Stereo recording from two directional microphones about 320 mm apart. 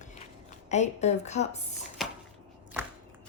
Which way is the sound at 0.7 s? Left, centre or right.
Left.